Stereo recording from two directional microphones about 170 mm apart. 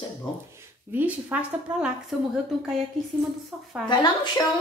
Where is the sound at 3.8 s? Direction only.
25° left (ahead or behind).